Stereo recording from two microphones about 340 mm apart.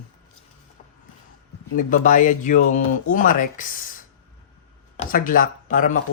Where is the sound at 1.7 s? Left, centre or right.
Left.